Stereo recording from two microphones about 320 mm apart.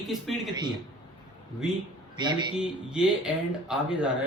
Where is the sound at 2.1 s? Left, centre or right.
Centre.